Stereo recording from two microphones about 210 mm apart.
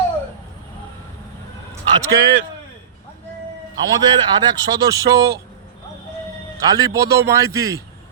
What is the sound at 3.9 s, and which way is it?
Speech, 20° right (ahead or behind).